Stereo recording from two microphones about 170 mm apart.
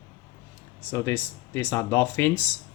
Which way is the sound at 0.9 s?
15° left (ahead or behind).